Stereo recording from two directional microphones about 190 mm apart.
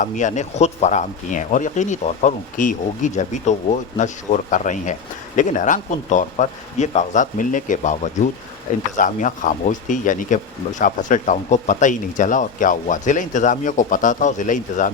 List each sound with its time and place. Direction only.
0.0 s speech: 40° left (ahead or behind)